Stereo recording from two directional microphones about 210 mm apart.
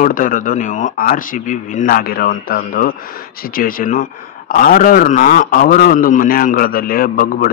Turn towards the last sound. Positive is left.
turn(degrees=45)  # may be behind; listen again after turning